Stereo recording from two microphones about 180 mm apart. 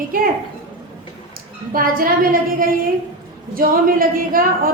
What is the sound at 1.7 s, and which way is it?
A woman's voice, 50° right (ahead or behind).